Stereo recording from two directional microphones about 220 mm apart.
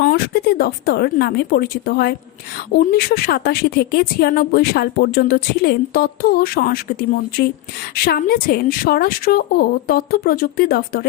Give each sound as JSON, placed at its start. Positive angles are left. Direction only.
{"t": 0.0, "sound": "a woman's voice", "side_deg": 45}
{"t": 7.9, "sound": "a woman's voice", "side_deg": 45}